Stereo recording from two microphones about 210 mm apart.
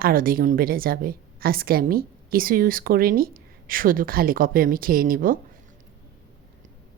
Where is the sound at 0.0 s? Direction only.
45° right (ahead or behind).